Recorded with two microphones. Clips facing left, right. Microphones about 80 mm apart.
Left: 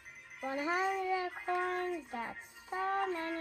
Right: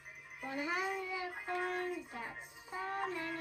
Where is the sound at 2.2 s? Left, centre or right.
Left.